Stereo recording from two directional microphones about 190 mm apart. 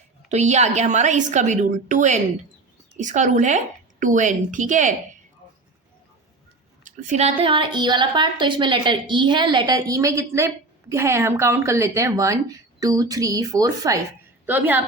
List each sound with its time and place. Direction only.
0.3 s a woman's voice: 35° right (ahead or behind)
6.8 s a woman's voice: 40° right (ahead or behind); by 14.8 s 10° right (ahead or behind)